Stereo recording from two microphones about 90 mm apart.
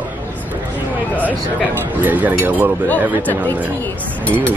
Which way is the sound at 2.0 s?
20° right (ahead or behind).